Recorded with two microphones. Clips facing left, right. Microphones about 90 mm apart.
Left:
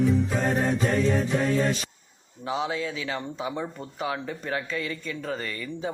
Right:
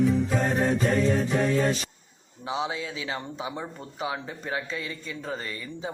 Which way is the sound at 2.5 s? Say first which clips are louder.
Left 2 dB; 25° right (ahead or behind).